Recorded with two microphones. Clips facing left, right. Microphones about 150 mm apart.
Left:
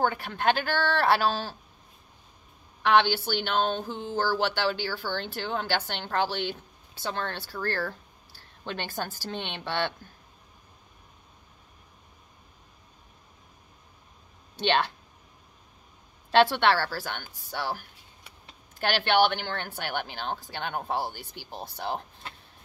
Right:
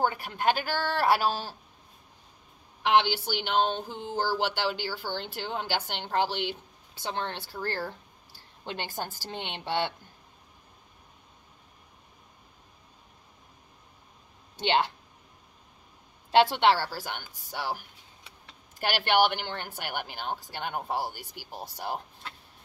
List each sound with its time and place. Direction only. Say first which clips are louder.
0.0 s speech: left 1 dB; 10° right (ahead or behind)
2.9 s speech: left 2 dB; 15° right (ahead or behind)
14.6 s speech: even; 15° right (ahead or behind)
16.3 s speech: even; 15° right (ahead or behind)